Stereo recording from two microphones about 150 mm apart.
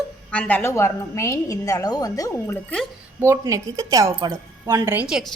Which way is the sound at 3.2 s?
20° right (ahead or behind).